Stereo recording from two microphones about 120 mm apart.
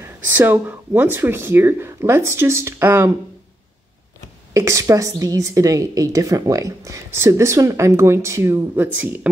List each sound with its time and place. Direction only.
0.0 s a woman's voice: 15° right (ahead or behind)
4.6 s a woman's voice: 25° right (ahead or behind)